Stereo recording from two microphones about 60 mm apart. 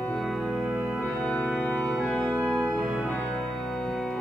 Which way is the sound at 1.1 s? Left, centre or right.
Left.